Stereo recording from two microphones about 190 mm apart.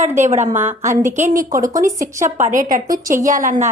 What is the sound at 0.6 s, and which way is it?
Speech, 10° right (ahead or behind).